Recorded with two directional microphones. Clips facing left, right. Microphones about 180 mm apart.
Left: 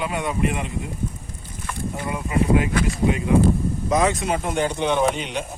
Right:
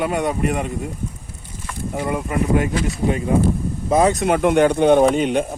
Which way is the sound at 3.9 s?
40° right (ahead or behind).